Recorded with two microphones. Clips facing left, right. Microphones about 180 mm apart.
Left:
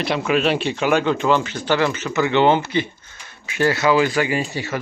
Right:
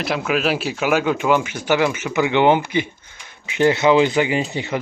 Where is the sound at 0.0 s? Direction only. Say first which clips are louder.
Left 1 dB; 5° right (ahead or behind).